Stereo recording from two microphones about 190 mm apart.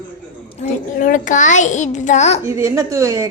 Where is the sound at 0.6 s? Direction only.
45° left (ahead or behind).